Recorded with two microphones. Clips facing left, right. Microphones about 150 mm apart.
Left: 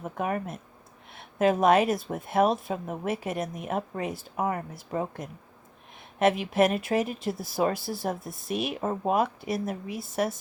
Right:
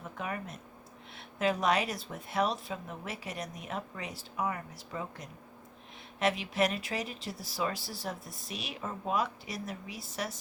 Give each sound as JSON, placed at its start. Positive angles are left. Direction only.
{"t": 0.0, "sound": "speech", "side_deg": 50}